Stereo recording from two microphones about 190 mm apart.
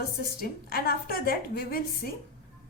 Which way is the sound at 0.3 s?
50° left (ahead or behind).